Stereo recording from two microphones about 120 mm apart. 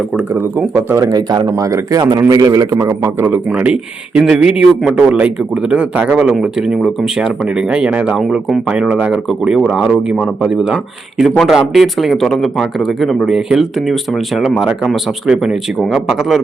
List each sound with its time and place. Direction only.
0.2 s speech: 15° right (ahead or behind)